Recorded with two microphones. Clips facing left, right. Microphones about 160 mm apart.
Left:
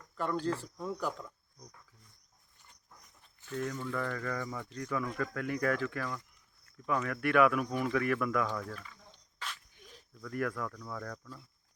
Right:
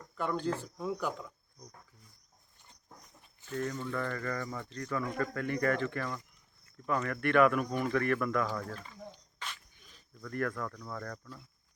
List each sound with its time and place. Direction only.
0.2 s speech: centre (ahead or behind)
3.5 s speech: 5° left (ahead or behind)
8.7 s speech: 35° right (ahead or behind)
9.1 s a sound: centre (ahead or behind)
10.2 s speech: 5° left (ahead or behind)